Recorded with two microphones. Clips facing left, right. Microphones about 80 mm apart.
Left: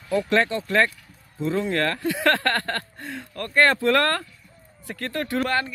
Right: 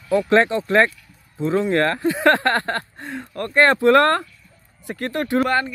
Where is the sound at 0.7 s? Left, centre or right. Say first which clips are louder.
Right 4 dB; right.